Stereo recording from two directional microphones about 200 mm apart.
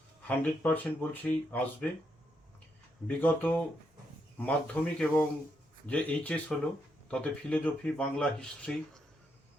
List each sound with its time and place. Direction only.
0.3 s speech: 5° left (ahead or behind)
3.1 s speech: 10° left (ahead or behind)